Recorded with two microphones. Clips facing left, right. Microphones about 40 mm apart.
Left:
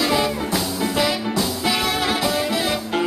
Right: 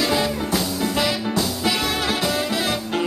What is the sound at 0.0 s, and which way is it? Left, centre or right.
Music, left.